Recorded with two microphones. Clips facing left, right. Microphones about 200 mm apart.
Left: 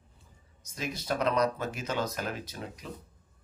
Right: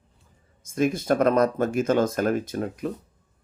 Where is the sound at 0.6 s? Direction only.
50° right (ahead or behind).